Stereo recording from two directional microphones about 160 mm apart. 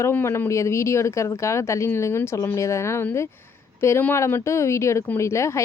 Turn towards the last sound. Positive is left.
turn(degrees=20)  # may be behind; listen again after turning